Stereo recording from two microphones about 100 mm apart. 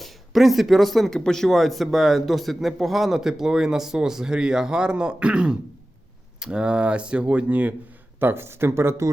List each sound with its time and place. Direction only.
0.0 s speech: centre (ahead or behind); by 9.0 s 25° right (ahead or behind)